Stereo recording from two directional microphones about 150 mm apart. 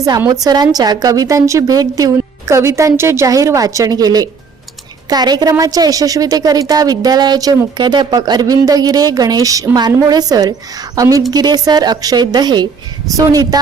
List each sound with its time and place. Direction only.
0.3 s a woman's voice: 25° right (ahead or behind)